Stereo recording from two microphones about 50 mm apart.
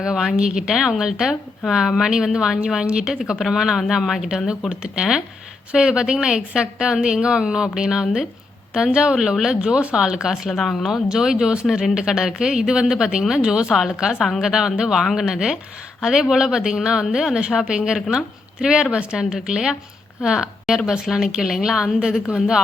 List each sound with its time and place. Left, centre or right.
0.3 s speech: centre
2.8 s speech: centre
4.7 s speech: right
10.5 s speech: centre
11.1 s speech: centre